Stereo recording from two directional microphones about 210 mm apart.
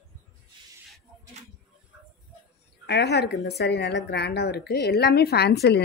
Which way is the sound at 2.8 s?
50° left (ahead or behind).